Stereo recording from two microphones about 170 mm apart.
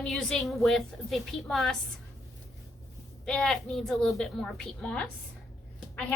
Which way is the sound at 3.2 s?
Centre (ahead or behind).